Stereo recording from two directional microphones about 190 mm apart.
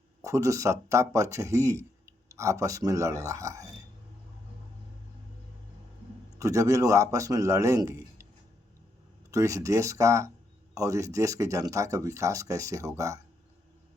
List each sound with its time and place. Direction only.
0.2 s speech: 15° right (ahead or behind)
6.4 s speech: 15° right (ahead or behind)
9.3 s speech: 15° right (ahead or behind)